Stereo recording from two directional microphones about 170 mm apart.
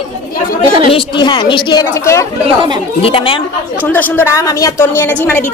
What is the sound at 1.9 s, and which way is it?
Speech, 15° left (ahead or behind).